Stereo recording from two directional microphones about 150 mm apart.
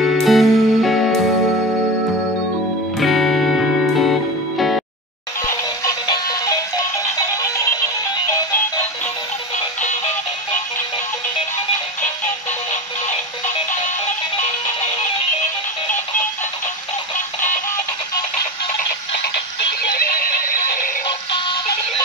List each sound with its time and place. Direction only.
0.0 s music: centre (ahead or behind)
3.0 s music: centre (ahead or behind)
5.5 s music: 25° left (ahead or behind)
20.0 s synthetic singing: 75° left (ahead or behind)